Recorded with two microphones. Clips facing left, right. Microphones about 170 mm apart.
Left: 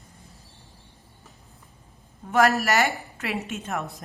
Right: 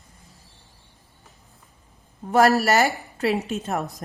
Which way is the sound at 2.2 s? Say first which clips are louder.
Right 3 dB; 35° right (ahead or behind).